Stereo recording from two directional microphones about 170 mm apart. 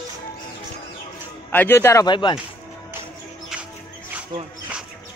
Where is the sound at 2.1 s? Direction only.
25° left (ahead or behind).